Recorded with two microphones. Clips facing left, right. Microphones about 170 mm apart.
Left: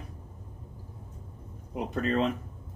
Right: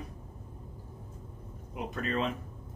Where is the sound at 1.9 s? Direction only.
35° left (ahead or behind).